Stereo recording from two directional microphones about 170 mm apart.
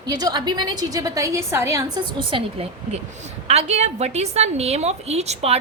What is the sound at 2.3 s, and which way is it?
A woman's voice, 35° right (ahead or behind).